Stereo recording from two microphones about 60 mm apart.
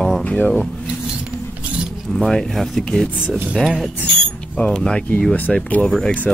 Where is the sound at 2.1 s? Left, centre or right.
Centre.